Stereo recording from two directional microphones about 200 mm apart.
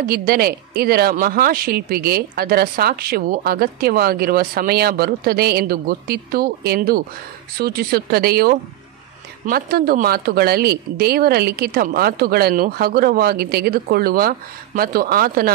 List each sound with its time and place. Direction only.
0.0 s speech: 45° right (ahead or behind)